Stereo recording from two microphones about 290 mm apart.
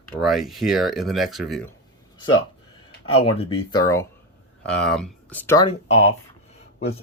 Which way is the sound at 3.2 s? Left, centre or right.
Centre.